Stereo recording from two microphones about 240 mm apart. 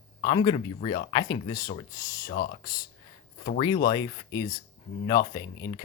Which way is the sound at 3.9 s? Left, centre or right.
Centre.